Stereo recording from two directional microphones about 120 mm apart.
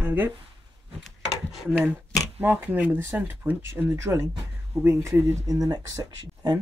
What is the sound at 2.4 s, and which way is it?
Speech, 15° right (ahead or behind).